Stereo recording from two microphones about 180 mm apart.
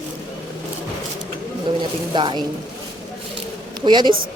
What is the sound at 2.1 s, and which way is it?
Speech, 25° right (ahead or behind).